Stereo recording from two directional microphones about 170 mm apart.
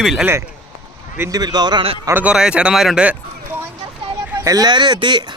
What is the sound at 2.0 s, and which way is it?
Speech, 10° right (ahead or behind).